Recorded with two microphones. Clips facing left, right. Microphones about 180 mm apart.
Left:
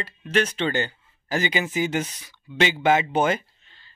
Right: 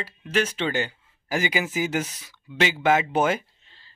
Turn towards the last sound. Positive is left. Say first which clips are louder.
# even
turn(degrees=-30)  # may be behind; listen again after turning